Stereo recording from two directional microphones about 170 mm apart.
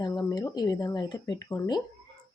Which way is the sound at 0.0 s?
25° left (ahead or behind).